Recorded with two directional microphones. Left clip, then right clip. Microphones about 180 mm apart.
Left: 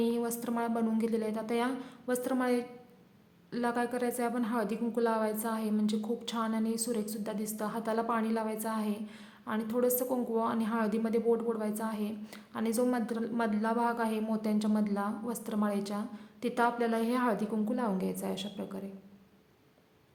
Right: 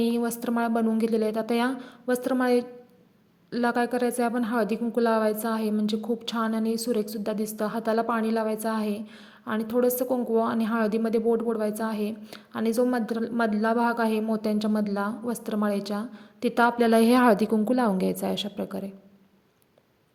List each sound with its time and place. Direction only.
0.0 s a woman's voice: 30° right (ahead or behind)